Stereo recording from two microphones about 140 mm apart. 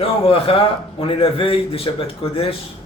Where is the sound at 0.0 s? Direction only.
40° left (ahead or behind).